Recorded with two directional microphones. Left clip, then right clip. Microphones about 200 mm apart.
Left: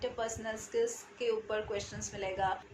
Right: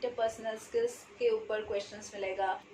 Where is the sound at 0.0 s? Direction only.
15° left (ahead or behind).